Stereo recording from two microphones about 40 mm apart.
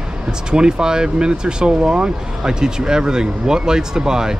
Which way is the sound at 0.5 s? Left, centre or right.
Centre.